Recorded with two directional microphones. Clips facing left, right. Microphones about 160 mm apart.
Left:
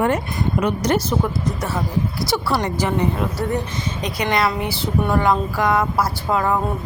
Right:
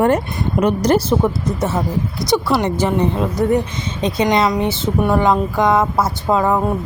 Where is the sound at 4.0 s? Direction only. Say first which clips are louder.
Right 6 dB; 25° right (ahead or behind).